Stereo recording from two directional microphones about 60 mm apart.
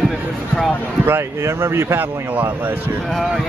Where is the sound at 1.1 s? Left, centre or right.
Right.